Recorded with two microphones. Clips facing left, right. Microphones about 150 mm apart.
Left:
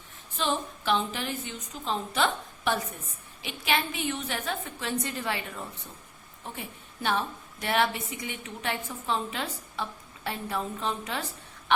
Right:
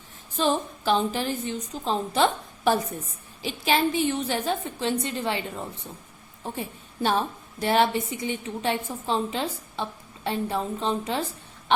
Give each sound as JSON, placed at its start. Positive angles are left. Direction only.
{"t": 0.3, "sound": "a woman's voice", "side_deg": -35}
{"t": 7.0, "sound": "a woman's voice", "side_deg": -30}